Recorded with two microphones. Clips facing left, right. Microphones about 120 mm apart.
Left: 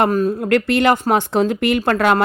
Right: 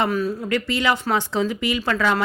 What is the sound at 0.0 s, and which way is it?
Speech, 45° left (ahead or behind).